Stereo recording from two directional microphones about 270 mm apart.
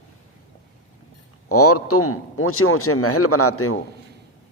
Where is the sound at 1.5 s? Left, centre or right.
Left.